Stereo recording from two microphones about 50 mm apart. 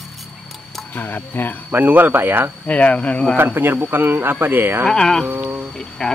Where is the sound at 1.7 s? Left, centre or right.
Right.